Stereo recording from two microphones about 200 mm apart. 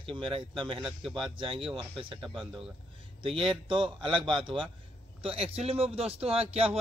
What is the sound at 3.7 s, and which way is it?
A man's voice, 25° right (ahead or behind).